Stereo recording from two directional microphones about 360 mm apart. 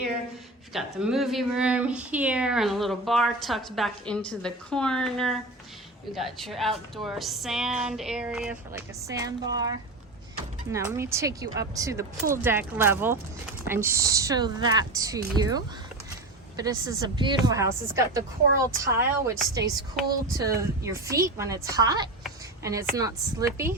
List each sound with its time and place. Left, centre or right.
0.7 s speech: centre
10.7 s a woman's voice: centre